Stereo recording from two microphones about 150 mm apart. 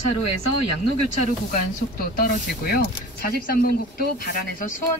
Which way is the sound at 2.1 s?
80° left.